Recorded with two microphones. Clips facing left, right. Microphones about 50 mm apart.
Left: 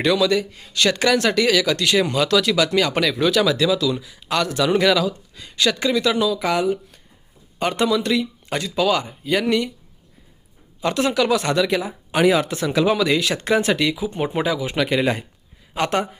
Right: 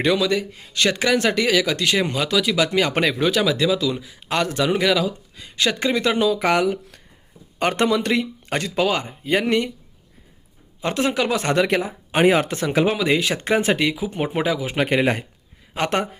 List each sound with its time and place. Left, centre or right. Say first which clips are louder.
0.0 s speech: left 1 dB; centre
2.1 s speech: left 2 dB; centre
2.9 s speech: left 1 dB; right
4.7 s speech: left 3 dB; centre
5.0 s a sound: left 1 dB; centre
5.5 s speech: left 1 dB; right
6.4 s speech: right 1 dB; right
10.8 s speech: left 2 dB; right
12.9 s speech: left 1 dB; right